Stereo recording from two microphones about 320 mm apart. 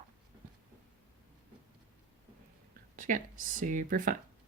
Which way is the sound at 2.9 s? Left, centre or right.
Right.